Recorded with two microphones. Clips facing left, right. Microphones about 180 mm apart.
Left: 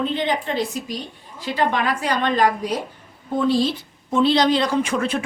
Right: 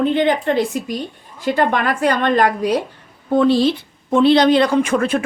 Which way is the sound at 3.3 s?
70° right (ahead or behind).